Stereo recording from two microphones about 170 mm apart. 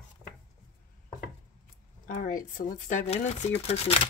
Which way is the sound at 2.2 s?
55° left (ahead or behind).